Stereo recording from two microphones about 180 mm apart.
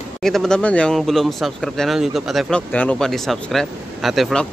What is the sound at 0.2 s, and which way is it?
Speech, centre (ahead or behind).